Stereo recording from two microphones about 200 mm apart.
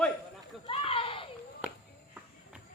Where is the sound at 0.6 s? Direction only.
30° left (ahead or behind).